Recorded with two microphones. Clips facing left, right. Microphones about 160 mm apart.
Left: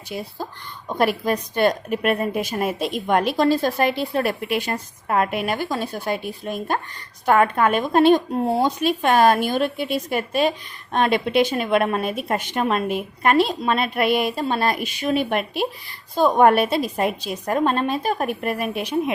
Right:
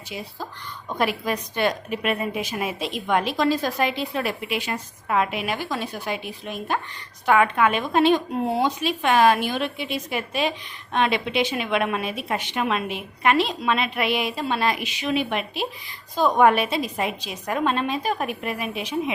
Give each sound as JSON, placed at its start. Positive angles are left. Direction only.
{"t": 1.0, "sound": "a woman's voice", "side_deg": 45}
{"t": 3.3, "sound": "a woman's voice", "side_deg": 35}